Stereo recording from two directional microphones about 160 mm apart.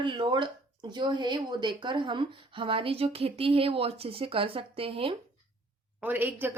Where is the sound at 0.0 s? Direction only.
30° right (ahead or behind).